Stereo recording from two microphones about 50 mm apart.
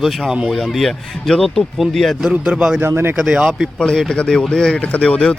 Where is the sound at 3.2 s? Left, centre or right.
Centre.